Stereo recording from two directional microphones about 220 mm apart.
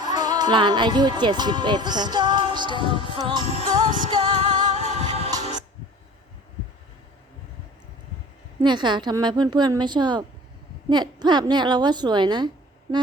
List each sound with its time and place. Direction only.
0.0 s speech: 20° right (ahead or behind)
3.4 s music: 30° left (ahead or behind)
4.1 s a woman's voice: 25° right (ahead or behind)
4.4 s music: 25° right (ahead or behind)
8.6 s a woman's voice: 20° right (ahead or behind)